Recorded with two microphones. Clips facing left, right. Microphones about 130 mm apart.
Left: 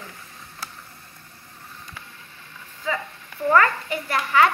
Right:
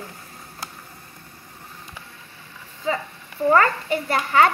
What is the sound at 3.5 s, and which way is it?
A child's voice, 25° right (ahead or behind).